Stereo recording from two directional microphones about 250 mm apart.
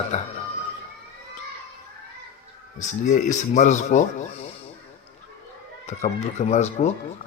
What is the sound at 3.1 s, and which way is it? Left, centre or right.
Speech, left.